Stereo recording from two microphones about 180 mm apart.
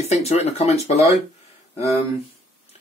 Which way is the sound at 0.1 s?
35° left (ahead or behind).